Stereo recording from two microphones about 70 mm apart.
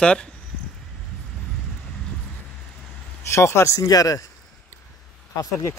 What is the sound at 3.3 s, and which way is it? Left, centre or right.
Speech, left.